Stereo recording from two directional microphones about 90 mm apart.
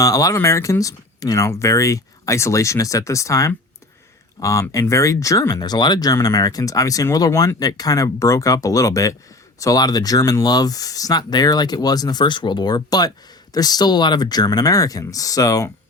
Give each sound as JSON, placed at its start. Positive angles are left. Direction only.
{"t": 0.0, "sound": "speech", "side_deg": 40}